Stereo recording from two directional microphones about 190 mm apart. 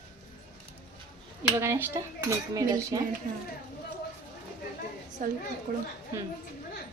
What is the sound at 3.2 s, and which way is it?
Speech, 40° right (ahead or behind).